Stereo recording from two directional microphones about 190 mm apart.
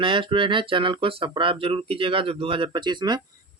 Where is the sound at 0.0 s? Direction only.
25° right (ahead or behind).